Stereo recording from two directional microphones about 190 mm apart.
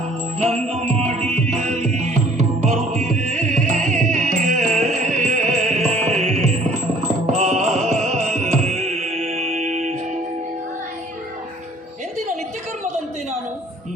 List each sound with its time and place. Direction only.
0.7 s music: 35° right (ahead or behind)